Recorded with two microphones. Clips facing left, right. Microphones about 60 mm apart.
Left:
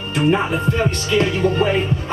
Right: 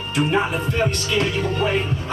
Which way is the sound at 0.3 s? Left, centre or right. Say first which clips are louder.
Left 6 dB; left.